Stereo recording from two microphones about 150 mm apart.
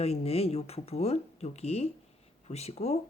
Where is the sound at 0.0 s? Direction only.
45° left (ahead or behind).